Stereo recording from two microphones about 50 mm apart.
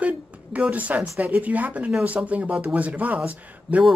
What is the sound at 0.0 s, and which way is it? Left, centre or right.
Speech, right.